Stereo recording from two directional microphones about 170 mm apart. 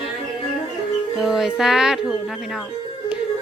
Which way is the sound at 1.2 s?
Centre (ahead or behind).